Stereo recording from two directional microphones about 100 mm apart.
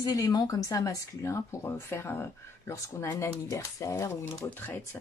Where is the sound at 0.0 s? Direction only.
40° left (ahead or behind).